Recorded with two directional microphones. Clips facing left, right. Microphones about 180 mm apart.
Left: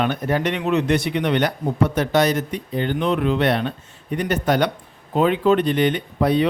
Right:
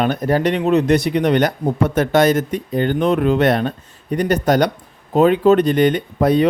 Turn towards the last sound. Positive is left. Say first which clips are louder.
# right 4 dB
turn(degrees=-45)  # may be behind; listen again after turning